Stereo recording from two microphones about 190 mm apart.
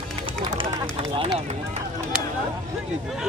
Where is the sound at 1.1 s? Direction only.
30° right (ahead or behind).